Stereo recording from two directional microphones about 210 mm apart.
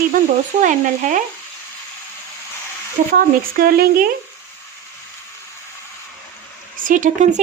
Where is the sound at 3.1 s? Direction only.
45° right (ahead or behind).